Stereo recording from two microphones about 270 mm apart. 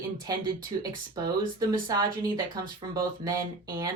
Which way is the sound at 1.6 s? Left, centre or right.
Centre.